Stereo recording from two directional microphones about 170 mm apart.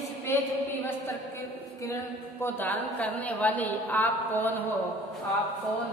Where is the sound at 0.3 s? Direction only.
15° left (ahead or behind).